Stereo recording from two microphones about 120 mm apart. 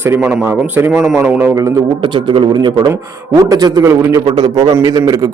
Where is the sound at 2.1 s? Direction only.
40° right (ahead or behind).